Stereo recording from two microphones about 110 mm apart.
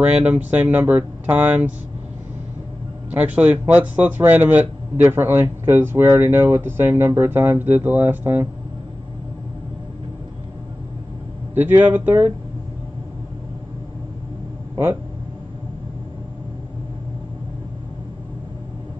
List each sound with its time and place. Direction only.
0.0 s speech: 15° right (ahead or behind)
3.1 s speech: 15° right (ahead or behind)
11.5 s speech: 15° right (ahead or behind)